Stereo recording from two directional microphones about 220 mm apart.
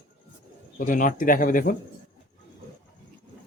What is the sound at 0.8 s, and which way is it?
Speech, 35° left (ahead or behind).